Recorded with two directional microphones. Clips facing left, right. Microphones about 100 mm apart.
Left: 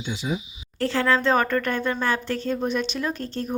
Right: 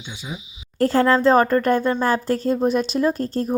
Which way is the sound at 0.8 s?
40° right (ahead or behind).